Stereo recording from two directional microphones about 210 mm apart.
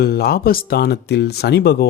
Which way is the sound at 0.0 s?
50° left (ahead or behind).